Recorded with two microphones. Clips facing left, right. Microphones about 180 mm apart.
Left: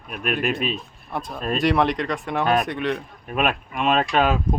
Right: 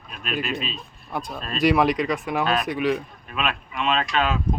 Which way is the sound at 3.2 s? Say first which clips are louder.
Left 6 dB; 50° left (ahead or behind).